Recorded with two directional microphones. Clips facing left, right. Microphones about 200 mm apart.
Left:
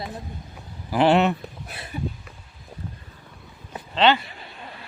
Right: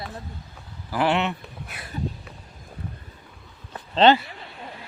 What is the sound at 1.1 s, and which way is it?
Speech, 35° left (ahead or behind).